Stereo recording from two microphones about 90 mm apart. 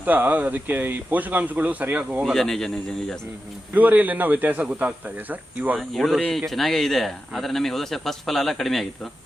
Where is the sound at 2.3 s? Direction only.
5° left (ahead or behind).